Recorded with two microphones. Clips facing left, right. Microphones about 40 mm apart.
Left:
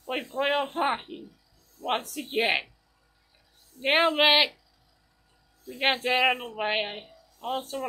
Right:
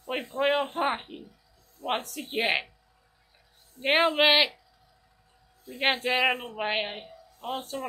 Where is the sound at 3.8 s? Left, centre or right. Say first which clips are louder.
Even; centre.